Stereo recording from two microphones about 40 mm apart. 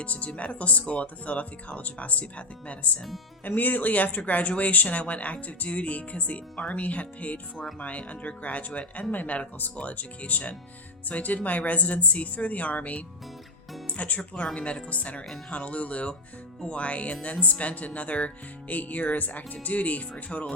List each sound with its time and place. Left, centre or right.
0.0 s speech: left
3.4 s speech: left
13.8 s music: left
14.5 s speech: left